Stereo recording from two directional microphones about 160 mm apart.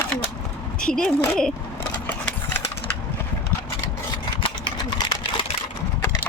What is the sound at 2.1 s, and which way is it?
Engine, 10° left (ahead or behind).